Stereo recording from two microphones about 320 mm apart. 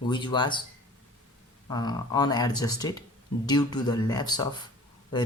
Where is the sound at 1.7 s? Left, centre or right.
Centre.